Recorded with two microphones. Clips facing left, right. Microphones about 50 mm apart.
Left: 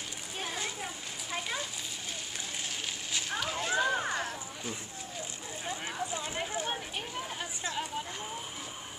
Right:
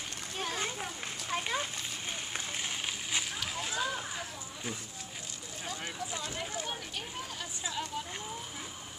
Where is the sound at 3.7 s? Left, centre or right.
Left.